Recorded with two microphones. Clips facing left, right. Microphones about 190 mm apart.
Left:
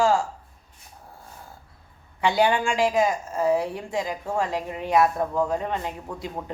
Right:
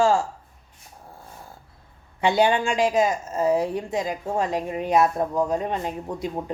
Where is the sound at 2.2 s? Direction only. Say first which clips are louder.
Right 1 dB; 20° right (ahead or behind).